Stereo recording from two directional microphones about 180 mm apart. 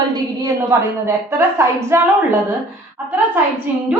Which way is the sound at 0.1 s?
15° right (ahead or behind).